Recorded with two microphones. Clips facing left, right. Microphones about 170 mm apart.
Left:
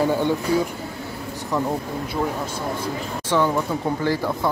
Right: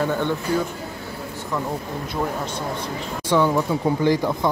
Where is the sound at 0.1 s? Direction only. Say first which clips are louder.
Left 2 dB; 10° left (ahead or behind).